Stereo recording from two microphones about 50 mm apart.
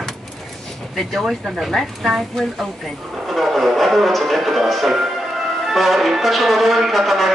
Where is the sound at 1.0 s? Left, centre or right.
Centre.